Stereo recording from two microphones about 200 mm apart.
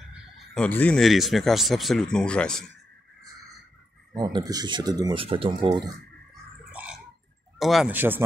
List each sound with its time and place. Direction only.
0.1 s fowl: 5° right (ahead or behind)
0.7 s speech: 5° left (ahead or behind)
4.2 s speech: 20° right (ahead or behind)
6.7 s a sound: 5° right (ahead or behind)
7.5 s speech: centre (ahead or behind)